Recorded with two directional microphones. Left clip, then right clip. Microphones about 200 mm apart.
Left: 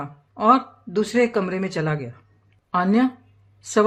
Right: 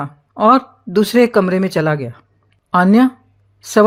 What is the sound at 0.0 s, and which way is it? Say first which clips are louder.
Speech: right 7 dB; 35° right (ahead or behind).